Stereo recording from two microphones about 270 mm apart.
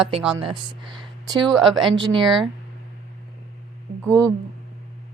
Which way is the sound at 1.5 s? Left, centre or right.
Centre.